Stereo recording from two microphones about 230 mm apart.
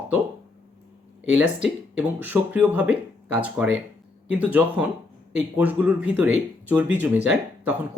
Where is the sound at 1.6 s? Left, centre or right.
Centre.